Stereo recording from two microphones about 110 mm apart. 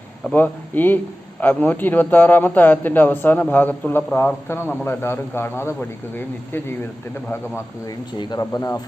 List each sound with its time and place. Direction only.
0.3 s a man's voice: 15° left (ahead or behind)
7.9 s speech: 40° left (ahead or behind)